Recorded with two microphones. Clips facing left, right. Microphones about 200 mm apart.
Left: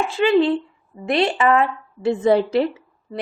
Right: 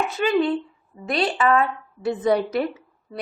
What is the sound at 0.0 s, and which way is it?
Speech, 25° left (ahead or behind).